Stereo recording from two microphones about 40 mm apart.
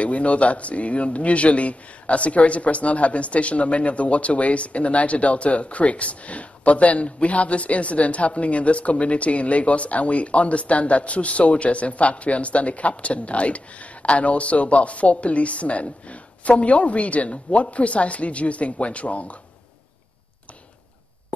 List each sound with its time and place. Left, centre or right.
0.0 s a man's voice: left